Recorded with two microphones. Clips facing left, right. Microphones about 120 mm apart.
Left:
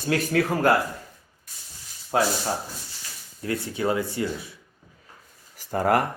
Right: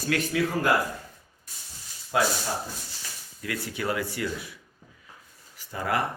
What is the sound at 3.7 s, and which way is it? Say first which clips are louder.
Speech: left 4 dB; 25° left (ahead or behind).